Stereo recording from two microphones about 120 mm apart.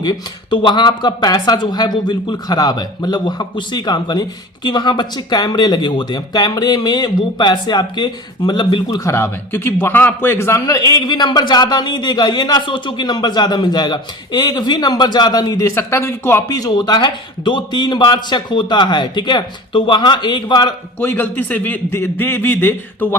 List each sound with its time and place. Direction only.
0.0 s a man's voice: 35° left (ahead or behind)
9.0 s a man's voice: 20° left (ahead or behind); by 20.7 s 35° left (ahead or behind)
21.0 s speech: 15° left (ahead or behind)